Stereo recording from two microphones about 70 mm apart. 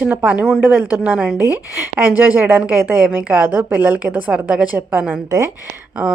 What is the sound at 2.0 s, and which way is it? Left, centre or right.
A woman's voice, right.